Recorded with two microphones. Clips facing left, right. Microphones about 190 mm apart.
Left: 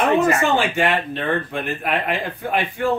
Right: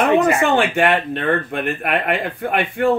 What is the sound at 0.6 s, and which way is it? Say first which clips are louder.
Speech: right 3 dB; 60° right (ahead or behind).